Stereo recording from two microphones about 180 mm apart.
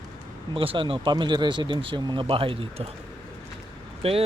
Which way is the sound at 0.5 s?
30° right (ahead or behind).